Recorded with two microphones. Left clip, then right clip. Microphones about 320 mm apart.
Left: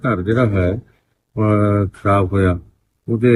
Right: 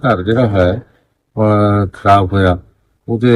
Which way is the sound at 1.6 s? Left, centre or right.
Right.